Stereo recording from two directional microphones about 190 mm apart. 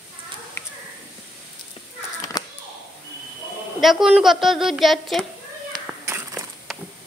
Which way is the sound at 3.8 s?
Centre (ahead or behind).